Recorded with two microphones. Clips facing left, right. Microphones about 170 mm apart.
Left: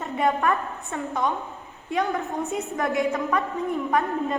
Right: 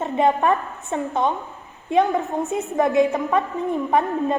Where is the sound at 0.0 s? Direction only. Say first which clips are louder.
Right 4 dB; 20° right (ahead or behind).